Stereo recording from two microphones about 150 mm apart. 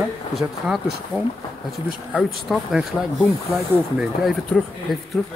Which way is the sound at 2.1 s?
5° right (ahead or behind).